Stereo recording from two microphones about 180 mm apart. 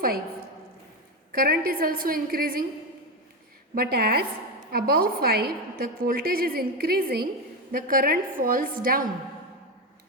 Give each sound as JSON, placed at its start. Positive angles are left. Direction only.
{"t": 1.3, "sound": "a woman's voice", "side_deg": -55}
{"t": 3.8, "sound": "a woman's voice", "side_deg": -55}